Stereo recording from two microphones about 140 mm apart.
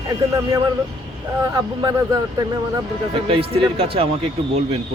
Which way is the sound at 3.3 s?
40° right (ahead or behind).